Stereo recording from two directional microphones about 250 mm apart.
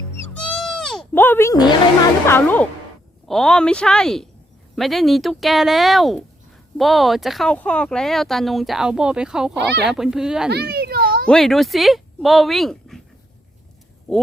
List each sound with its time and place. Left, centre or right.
0.3 s goat: centre
2.2 s speech: centre
10.5 s a sound: right
11.3 s speech: centre